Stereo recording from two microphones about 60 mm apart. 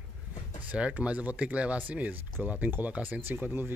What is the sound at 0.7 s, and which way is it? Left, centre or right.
Speech, right.